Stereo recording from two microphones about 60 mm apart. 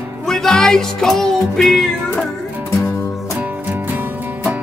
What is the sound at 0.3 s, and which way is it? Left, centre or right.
Music, centre.